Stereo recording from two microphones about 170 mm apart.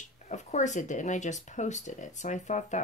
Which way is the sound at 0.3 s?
45° left (ahead or behind).